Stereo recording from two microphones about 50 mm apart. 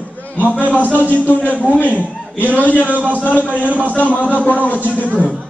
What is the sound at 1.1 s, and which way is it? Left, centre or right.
Speech, left.